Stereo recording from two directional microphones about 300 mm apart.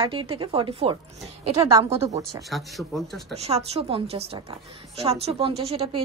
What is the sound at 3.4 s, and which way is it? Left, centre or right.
A woman's voice, right.